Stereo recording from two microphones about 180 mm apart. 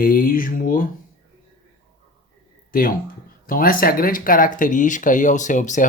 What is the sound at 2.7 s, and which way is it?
Speech, 55° left (ahead or behind).